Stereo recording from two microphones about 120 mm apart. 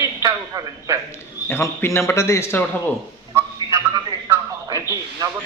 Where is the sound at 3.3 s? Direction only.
25° right (ahead or behind).